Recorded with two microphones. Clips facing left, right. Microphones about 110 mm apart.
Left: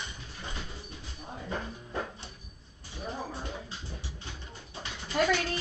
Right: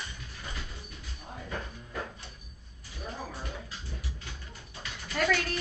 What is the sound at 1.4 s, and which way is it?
Music, 30° left (ahead or behind).